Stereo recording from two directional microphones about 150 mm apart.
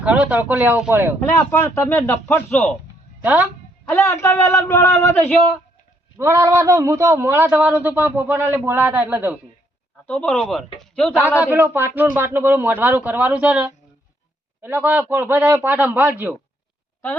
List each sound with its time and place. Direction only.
0.0 s a man's voice: 10° right (ahead or behind)
1.2 s a man's voice: 15° left (ahead or behind)
3.2 s a man's voice: 10° right (ahead or behind)
4.0 s speech: 20° left (ahead or behind)
6.1 s a man's voice: 20° right (ahead or behind)
10.1 s speech: 10° left (ahead or behind)
11.2 s a man's voice: 10° right (ahead or behind)